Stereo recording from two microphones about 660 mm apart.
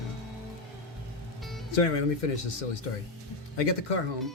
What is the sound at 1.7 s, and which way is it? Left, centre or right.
Speech, left.